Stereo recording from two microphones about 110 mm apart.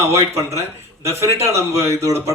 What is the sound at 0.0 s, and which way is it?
A man's voice, 25° right (ahead or behind).